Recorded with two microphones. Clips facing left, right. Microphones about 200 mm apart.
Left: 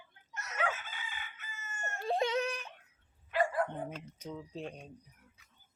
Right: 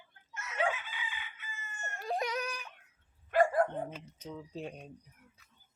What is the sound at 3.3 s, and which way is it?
Dog, 45° right (ahead or behind).